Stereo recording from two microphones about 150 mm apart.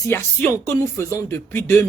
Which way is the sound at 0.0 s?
20° left (ahead or behind).